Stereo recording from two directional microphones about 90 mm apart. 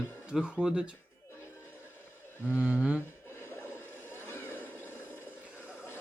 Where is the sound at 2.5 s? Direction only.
15° right (ahead or behind).